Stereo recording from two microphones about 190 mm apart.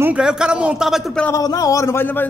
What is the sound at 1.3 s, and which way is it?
Speech, 20° left (ahead or behind).